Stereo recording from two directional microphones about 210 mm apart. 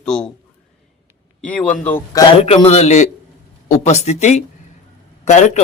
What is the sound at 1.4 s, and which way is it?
Speech, 5° left (ahead or behind).